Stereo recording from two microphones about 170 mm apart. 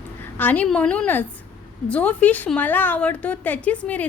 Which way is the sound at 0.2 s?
10° left (ahead or behind).